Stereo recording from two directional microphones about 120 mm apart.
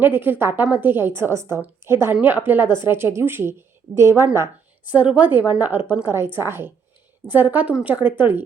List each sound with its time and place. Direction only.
0.0 s a woman's voice: 15° right (ahead or behind)